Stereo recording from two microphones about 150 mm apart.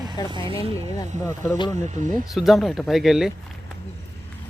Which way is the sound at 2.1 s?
Centre (ahead or behind).